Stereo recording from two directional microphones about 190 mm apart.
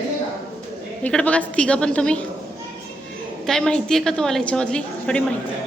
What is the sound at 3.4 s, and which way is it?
A woman's voice, 5° left (ahead or behind).